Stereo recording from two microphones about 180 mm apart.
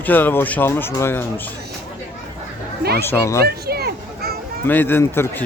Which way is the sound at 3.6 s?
60° right (ahead or behind).